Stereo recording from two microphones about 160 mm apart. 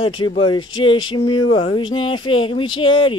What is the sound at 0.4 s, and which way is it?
Speech, 30° left (ahead or behind).